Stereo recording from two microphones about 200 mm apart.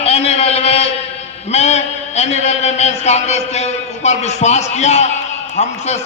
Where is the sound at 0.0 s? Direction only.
30° left (ahead or behind).